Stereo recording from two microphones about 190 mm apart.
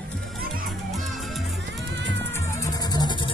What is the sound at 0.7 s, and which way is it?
Children playing, centre (ahead or behind).